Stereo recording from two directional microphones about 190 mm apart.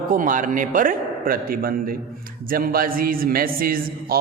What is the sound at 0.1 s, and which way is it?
A man's voice, 45° right (ahead or behind).